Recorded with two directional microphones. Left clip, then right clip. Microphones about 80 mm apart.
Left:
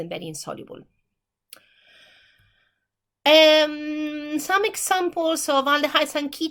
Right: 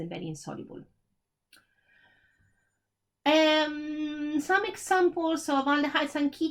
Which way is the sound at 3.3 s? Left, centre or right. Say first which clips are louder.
Left 9 dB; left.